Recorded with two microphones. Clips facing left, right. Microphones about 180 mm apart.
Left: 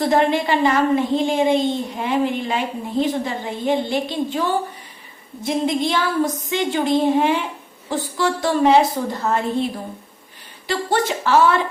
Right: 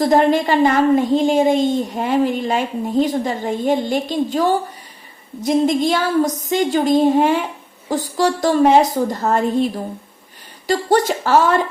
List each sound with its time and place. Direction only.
0.0 s a woman's voice: 40° right (ahead or behind)
10.7 s a woman's voice: 40° right (ahead or behind)